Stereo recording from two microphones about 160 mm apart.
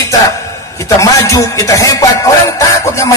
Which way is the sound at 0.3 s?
20° left (ahead or behind).